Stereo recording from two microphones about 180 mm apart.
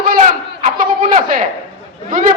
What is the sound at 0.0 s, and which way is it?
Crowd, 50° right (ahead or behind).